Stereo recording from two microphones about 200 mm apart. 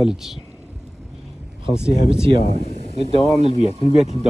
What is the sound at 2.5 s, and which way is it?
Speech, 35° right (ahead or behind).